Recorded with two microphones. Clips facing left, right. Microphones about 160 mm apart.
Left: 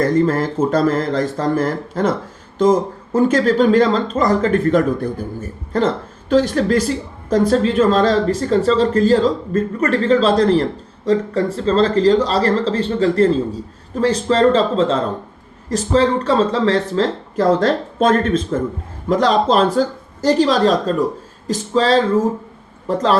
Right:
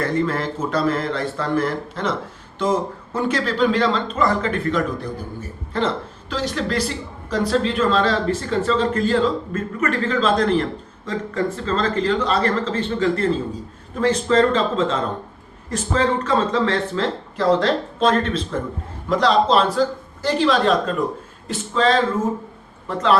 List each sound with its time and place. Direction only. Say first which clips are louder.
0.0 s speech: left 6 dB; 40° left (ahead or behind)